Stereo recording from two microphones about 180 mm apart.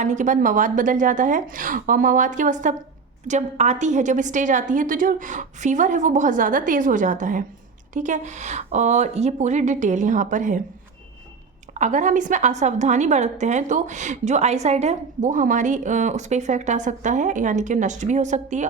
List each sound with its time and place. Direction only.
0.0 s a woman's voice: 45° right (ahead or behind)
11.7 s a woman's voice: 45° right (ahead or behind)